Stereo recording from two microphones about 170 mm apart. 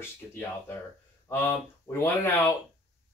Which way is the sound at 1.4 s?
15° left (ahead or behind).